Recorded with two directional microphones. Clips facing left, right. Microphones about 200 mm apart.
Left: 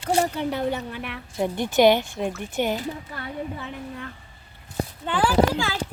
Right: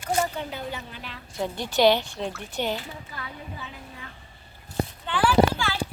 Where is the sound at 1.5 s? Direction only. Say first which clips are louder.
Left 3 dB; 50° left (ahead or behind).